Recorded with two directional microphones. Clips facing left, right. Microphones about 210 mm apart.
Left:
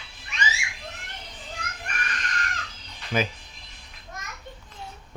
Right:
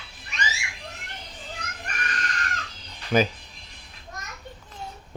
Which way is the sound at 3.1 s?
40° right (ahead or behind).